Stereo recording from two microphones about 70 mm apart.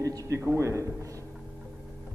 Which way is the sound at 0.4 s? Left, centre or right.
Right.